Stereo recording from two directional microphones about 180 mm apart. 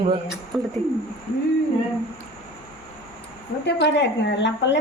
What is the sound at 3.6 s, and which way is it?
A woman's voice, 75° left (ahead or behind).